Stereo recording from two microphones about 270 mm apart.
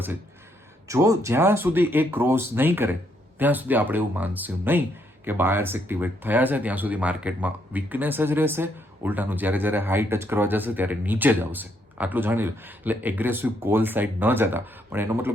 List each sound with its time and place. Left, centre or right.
0.9 s speech: centre